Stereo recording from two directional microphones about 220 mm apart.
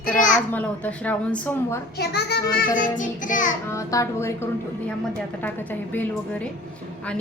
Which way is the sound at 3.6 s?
15° left (ahead or behind).